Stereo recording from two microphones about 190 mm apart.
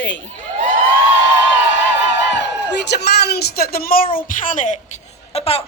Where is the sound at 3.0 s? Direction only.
55° left (ahead or behind); by 4.8 s 40° left (ahead or behind).